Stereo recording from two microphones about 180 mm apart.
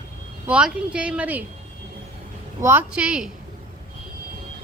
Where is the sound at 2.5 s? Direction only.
10° right (ahead or behind).